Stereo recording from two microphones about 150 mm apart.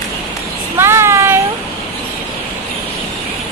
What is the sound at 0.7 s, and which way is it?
Child singing, 15° right (ahead or behind).